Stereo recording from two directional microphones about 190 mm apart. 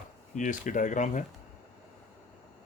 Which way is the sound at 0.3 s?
40° left (ahead or behind).